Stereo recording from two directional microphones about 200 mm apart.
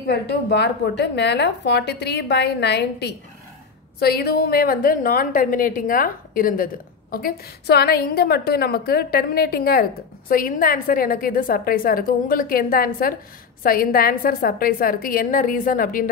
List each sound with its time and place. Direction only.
0.0 s a woman's voice: 55° left (ahead or behind)